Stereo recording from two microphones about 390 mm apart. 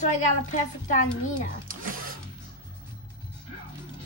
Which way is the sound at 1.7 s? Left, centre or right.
Right.